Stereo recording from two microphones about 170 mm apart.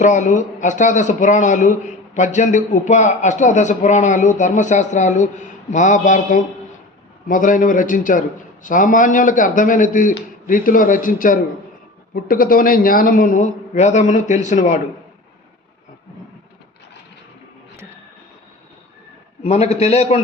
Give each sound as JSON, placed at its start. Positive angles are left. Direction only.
{"t": 0.0, "sound": "a man's voice", "side_deg": 45}
{"t": 19.4, "sound": "a man's voice", "side_deg": 40}